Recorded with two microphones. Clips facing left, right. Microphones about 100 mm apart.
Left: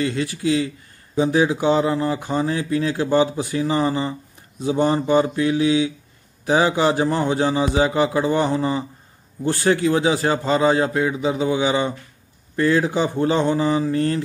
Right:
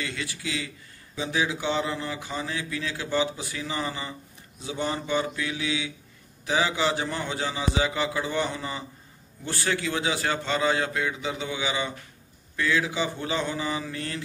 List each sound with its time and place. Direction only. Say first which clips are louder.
0.0 s speech: left 11 dB; 35° left (ahead or behind)